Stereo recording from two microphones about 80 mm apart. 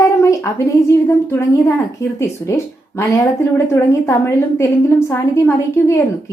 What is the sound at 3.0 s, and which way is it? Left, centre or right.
A woman's voice, left.